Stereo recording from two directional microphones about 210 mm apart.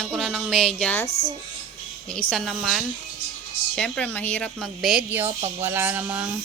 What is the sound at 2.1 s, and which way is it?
Speech, centre (ahead or behind).